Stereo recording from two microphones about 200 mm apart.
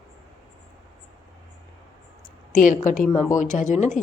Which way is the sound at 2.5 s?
40° left (ahead or behind).